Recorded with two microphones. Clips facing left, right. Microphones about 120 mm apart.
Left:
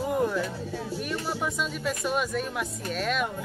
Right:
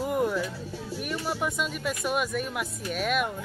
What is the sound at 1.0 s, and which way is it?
Speech, 5° right (ahead or behind).